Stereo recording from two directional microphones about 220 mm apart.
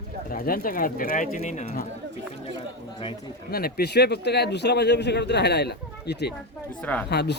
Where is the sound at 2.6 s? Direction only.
25° left (ahead or behind).